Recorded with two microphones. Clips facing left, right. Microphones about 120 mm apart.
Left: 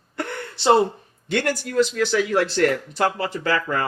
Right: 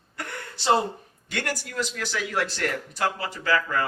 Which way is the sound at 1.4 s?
30° left (ahead or behind).